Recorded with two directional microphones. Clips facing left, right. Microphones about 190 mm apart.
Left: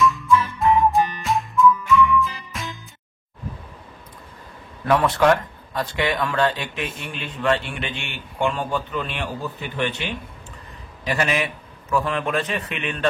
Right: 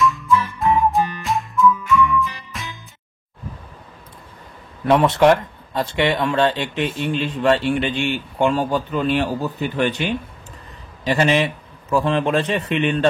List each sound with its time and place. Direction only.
0.0 s music: centre (ahead or behind)
4.8 s speech: 25° right (ahead or behind); by 10.1 s 40° right (ahead or behind)
11.1 s a man's voice: 30° right (ahead or behind)